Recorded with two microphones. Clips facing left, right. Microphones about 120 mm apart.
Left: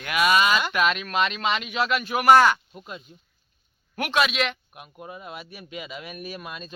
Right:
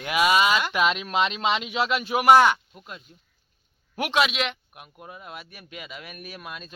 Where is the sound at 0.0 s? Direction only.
20° right (ahead or behind).